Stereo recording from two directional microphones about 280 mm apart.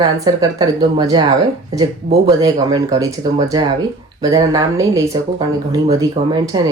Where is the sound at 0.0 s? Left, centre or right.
Centre.